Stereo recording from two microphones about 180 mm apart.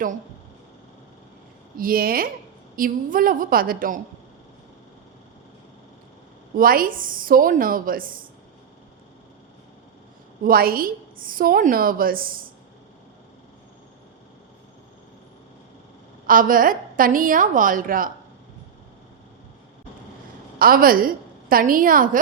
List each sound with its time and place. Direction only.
1.7 s a woman's voice: 55° right (ahead or behind)
6.6 s a woman's voice: 50° right (ahead or behind)
10.4 s a woman's voice: 55° right (ahead or behind)
16.2 s a woman's voice: 50° right (ahead or behind)
20.6 s a woman's voice: 55° right (ahead or behind)